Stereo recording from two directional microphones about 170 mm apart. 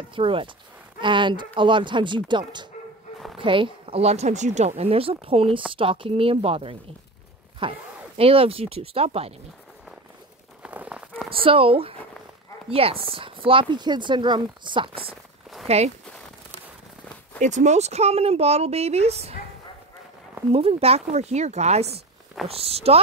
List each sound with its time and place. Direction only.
0.1 s a woman's voice: 30° right (ahead or behind)
10.6 s a sound: 5° right (ahead or behind)
11.2 s a woman's voice: 30° right (ahead or behind)
17.4 s a woman's voice: 45° right (ahead or behind)
20.5 s a woman's voice: 35° right (ahead or behind)